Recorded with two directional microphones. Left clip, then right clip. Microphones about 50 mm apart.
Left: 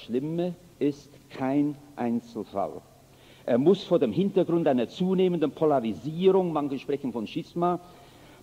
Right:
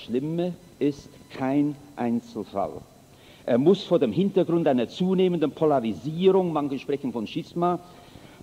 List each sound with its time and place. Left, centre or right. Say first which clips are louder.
0.0 s a man's voice: right 2 dB; right